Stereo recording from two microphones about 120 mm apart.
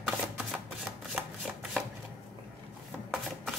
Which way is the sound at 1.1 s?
5° right (ahead or behind).